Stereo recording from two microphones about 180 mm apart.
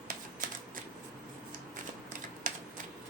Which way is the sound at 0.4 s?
45° right (ahead or behind).